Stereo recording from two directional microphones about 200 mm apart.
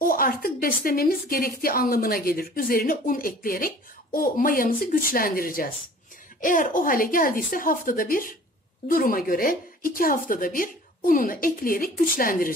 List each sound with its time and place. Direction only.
0.0 s a woman's voice: 45° left (ahead or behind)